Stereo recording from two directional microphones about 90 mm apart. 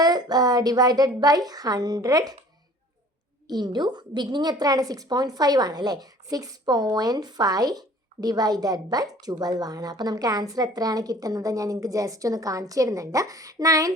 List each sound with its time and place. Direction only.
0.0 s a woman's voice: 50° right (ahead or behind)
3.4 s a woman's voice: 50° right (ahead or behind)